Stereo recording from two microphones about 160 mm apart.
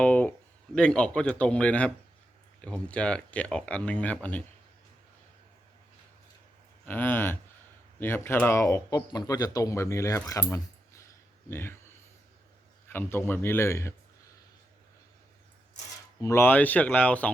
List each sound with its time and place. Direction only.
0.0 s a sound: 10° left (ahead or behind)
0.8 s speech: 5° left (ahead or behind)
6.8 s speech: 10° left (ahead or behind)
12.9 s speech: 15° left (ahead or behind)
16.2 s speech: 15° left (ahead or behind)